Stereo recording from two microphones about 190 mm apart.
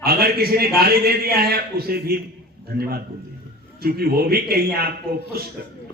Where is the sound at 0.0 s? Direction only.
55° right (ahead or behind).